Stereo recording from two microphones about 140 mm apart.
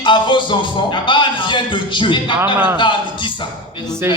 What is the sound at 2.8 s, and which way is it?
Speech, 35° left (ahead or behind).